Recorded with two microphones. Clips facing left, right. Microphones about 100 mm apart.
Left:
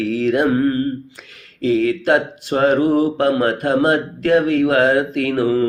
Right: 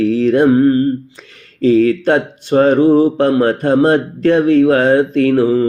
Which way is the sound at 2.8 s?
25° right (ahead or behind).